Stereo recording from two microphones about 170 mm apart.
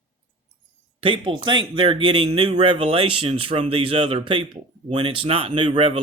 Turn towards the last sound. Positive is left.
turn(degrees=-30)  # may be behind; listen again after turning